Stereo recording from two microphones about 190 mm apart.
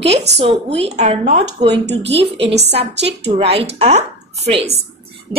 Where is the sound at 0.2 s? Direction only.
30° right (ahead or behind).